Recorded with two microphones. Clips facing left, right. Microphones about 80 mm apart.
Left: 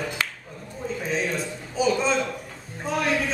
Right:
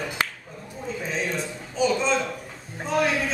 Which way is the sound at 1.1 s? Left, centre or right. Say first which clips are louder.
Left 2 dB; centre.